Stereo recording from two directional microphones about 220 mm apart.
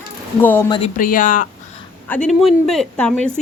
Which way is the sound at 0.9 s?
40° left (ahead or behind).